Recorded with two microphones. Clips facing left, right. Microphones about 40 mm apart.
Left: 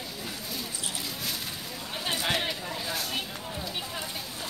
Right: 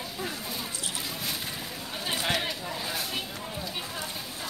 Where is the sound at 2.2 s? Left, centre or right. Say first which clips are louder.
Right 1 dB; centre.